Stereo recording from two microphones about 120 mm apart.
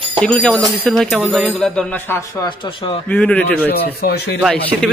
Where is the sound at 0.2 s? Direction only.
5° left (ahead or behind).